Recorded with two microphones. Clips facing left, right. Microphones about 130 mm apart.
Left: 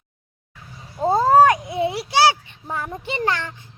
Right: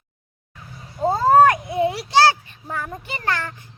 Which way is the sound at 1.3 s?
15° left (ahead or behind).